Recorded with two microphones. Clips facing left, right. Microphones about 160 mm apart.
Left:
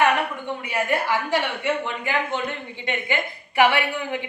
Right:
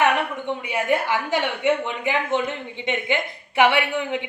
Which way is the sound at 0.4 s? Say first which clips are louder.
Right 2 dB; 20° right (ahead or behind).